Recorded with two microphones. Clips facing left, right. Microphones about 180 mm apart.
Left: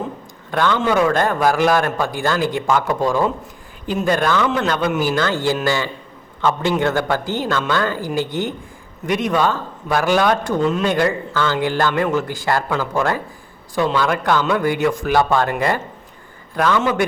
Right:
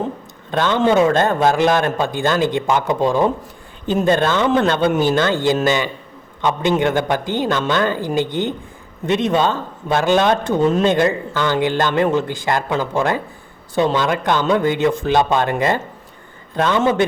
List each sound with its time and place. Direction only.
0.5 s a man's voice: 20° right (ahead or behind)